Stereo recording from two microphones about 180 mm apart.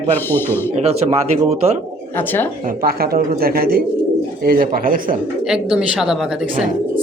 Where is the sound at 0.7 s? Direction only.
35° right (ahead or behind).